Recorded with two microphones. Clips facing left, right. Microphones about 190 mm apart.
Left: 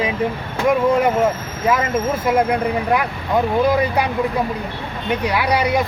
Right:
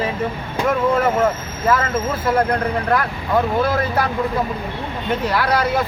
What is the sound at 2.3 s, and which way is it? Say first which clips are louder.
Speech: left 1 dB; 10° left (ahead or behind).